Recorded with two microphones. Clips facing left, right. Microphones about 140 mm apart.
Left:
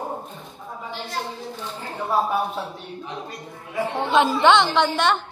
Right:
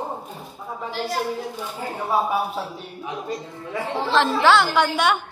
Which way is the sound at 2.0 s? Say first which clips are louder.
Even; 5° right (ahead or behind).